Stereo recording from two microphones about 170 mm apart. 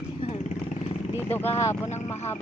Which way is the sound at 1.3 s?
10° left (ahead or behind).